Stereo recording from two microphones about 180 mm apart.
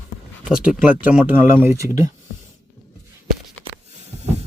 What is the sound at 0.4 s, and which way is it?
Speech, 5° right (ahead or behind).